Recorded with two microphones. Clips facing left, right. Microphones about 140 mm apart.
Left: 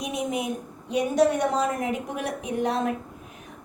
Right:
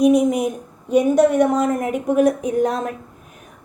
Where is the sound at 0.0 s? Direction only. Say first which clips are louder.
Right 13 dB; 45° right (ahead or behind).